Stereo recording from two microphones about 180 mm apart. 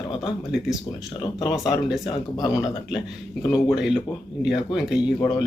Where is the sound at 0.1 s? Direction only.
25° left (ahead or behind).